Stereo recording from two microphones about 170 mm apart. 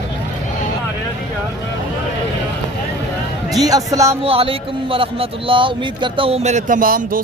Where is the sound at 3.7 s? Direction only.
20° right (ahead or behind).